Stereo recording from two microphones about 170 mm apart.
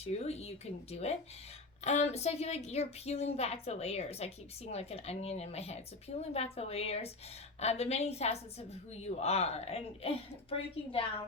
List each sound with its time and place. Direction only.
0.0 s a woman's voice: 40° left (ahead or behind)